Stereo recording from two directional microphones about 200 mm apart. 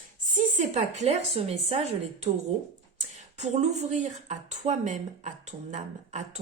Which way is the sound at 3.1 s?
35° right (ahead or behind).